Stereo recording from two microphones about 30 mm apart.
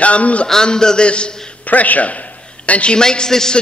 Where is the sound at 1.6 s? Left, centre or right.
Left.